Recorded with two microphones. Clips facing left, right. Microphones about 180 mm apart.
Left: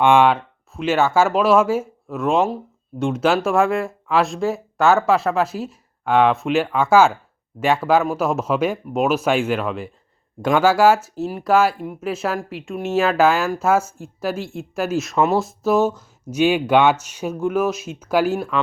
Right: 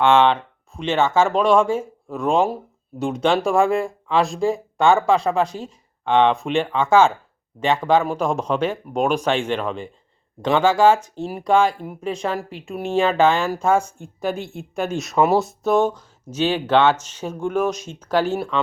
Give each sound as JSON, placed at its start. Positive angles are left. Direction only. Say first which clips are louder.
{"t": 0.0, "sound": "speech", "louder": "left 1 dB", "side_deg": 10}